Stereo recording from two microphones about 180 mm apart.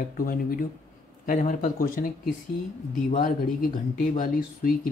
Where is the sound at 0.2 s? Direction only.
50° left (ahead or behind).